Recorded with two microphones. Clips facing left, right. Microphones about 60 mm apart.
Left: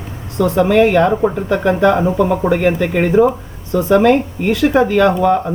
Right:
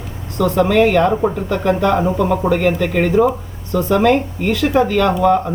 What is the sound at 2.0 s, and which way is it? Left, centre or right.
Speech, centre.